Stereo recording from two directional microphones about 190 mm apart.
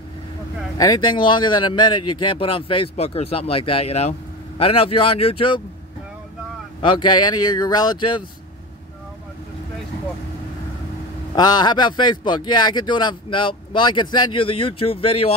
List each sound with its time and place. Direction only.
0.7 s speech: 20° left (ahead or behind)
6.8 s speech: 25° left (ahead or behind)
11.3 s speech: 20° left (ahead or behind)